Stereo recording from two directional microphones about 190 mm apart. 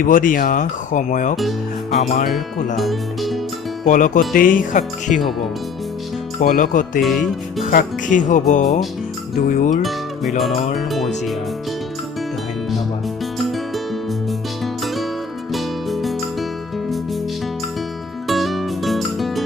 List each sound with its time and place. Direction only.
0.0 s speech: 45° left (ahead or behind)
2.7 s speech: centre (ahead or behind)
3.8 s speech: 45° left (ahead or behind)
6.4 s speech: 45° left (ahead or behind)
7.0 s speech: centre (ahead or behind)
7.6 s speech: 45° left (ahead or behind)
9.8 s speech: centre (ahead or behind)
15.5 s music: centre (ahead or behind)
18.3 s music: centre (ahead or behind)